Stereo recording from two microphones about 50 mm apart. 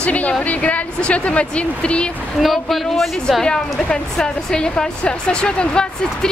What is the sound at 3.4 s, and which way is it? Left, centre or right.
A woman's voice, centre.